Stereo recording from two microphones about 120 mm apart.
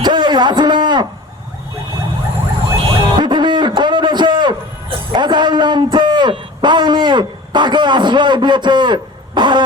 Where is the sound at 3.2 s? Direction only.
40° right (ahead or behind).